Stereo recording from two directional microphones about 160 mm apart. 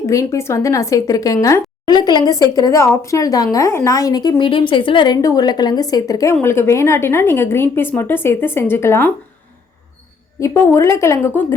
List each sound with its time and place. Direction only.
0.0 s a woman's voice: 20° left (ahead or behind)
10.4 s a woman's voice: 15° left (ahead or behind)